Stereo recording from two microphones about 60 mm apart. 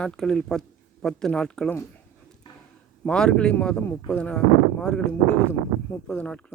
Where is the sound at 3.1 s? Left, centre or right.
Centre.